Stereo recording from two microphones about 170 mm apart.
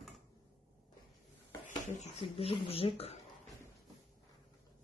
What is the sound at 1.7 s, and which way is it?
Speech, 40° left (ahead or behind).